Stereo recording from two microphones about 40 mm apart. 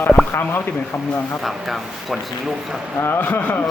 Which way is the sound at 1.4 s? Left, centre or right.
Centre.